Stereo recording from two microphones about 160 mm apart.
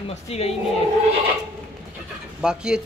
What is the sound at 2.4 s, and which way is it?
Speech, 5° right (ahead or behind).